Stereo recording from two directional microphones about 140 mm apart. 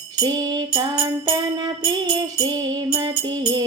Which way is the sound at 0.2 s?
30° right (ahead or behind).